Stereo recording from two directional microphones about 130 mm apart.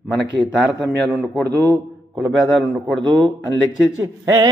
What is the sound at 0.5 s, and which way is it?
Speech, 5° right (ahead or behind).